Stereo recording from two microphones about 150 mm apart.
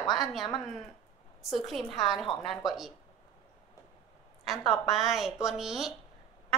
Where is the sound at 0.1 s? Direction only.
Centre (ahead or behind).